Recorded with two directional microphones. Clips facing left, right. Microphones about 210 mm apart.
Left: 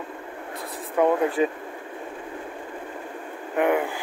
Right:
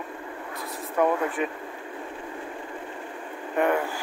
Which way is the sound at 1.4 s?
30° left (ahead or behind).